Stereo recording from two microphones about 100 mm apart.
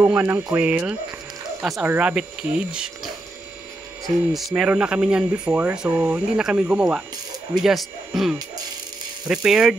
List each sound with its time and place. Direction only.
0.3 s speech: 30° right (ahead or behind)
0.6 s speech: 15° right (ahead or behind)
4.0 s speech: centre (ahead or behind)